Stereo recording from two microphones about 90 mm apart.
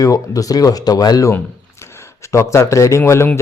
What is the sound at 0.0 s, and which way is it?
Speech, 40° left (ahead or behind).